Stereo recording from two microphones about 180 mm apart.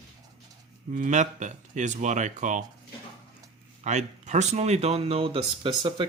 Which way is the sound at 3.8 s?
40° right (ahead or behind).